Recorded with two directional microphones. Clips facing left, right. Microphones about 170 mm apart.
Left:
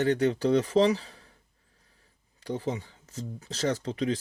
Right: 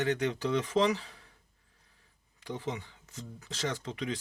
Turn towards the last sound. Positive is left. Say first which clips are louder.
# left 7 dB
turn(degrees=35)  # may be behind; listen again after turning